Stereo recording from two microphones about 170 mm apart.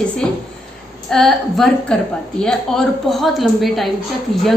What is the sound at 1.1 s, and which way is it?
A woman's voice, centre (ahead or behind).